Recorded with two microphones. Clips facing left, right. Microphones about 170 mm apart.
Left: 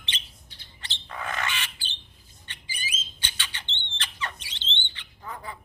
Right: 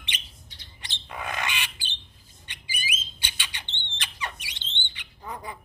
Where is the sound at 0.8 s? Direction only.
15° right (ahead or behind).